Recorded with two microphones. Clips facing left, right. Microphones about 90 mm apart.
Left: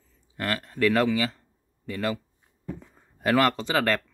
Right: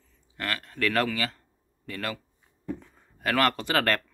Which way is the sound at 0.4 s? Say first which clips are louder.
Left 4 dB; 25° left (ahead or behind).